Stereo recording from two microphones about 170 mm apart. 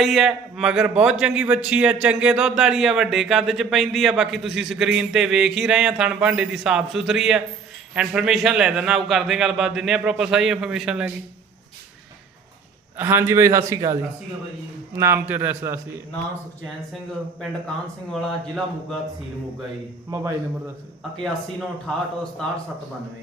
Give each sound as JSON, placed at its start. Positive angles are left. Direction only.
{"t": 0.0, "sound": "a man's voice", "side_deg": 0}
{"t": 13.0, "sound": "a man's voice", "side_deg": -15}
{"t": 18.1, "sound": "a man's voice", "side_deg": 0}
{"t": 20.1, "sound": "a man's voice", "side_deg": -20}
{"t": 21.8, "sound": "a man's voice", "side_deg": 5}